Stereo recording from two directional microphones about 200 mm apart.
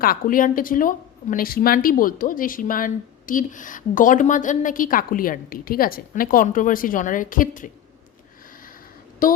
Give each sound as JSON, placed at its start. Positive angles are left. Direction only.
{"t": 0.0, "sound": "speech", "side_deg": 45}
{"t": 9.2, "sound": "speech", "side_deg": 45}